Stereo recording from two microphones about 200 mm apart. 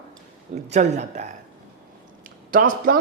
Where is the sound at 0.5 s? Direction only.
35° right (ahead or behind).